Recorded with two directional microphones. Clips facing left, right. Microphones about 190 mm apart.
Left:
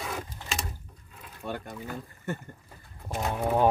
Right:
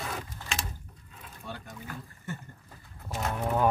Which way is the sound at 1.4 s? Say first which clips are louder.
Left 7 dB; 55° left (ahead or behind).